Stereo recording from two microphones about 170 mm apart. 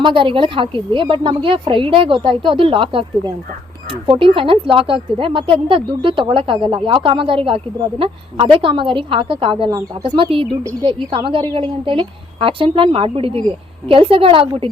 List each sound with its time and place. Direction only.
0.0 s a woman's voice: 30° right (ahead or behind)